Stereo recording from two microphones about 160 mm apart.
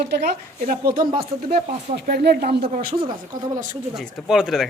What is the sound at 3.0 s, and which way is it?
Speech, 25° right (ahead or behind).